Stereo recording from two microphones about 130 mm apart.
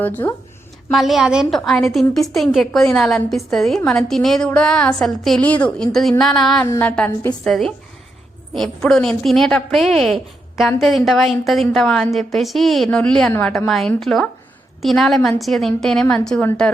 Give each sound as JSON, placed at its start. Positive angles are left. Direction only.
{"t": 0.0, "sound": "speech", "side_deg": 15}
{"t": 0.9, "sound": "a woman's voice", "side_deg": 0}
{"t": 6.7, "sound": "speech", "side_deg": 15}
{"t": 7.4, "sound": "a woman's voice", "side_deg": 5}